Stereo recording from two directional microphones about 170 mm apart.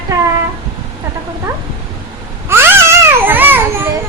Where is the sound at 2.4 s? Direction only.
15° right (ahead or behind).